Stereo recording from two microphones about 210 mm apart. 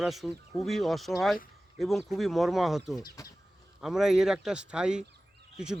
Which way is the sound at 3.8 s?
Centre (ahead or behind).